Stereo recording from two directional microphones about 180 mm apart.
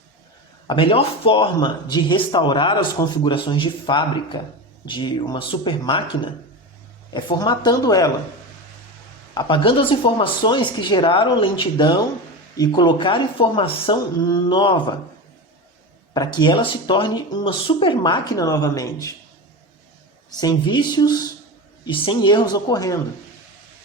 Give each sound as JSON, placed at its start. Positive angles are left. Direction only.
{"t": 0.7, "sound": "speech", "side_deg": 30}
{"t": 9.3, "sound": "speech", "side_deg": 25}
{"t": 16.1, "sound": "speech", "side_deg": 25}
{"t": 20.4, "sound": "speech", "side_deg": 25}